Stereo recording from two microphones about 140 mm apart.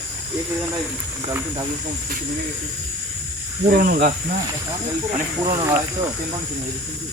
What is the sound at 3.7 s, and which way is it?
Speech, 90° right.